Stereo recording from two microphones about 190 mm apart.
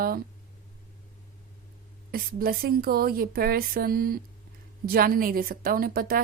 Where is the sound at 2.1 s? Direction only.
50° right (ahead or behind).